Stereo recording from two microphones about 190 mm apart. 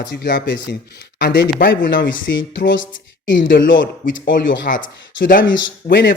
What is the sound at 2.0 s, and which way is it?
Speech, 80° left.